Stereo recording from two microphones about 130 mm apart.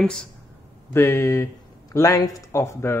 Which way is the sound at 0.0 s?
5° left (ahead or behind).